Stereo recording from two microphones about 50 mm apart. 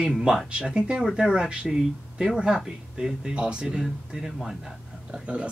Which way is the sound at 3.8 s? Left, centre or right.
Centre.